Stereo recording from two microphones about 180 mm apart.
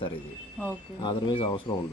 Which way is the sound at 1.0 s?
25° left (ahead or behind).